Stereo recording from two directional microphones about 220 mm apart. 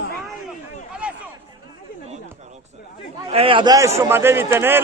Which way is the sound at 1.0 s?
5° right (ahead or behind).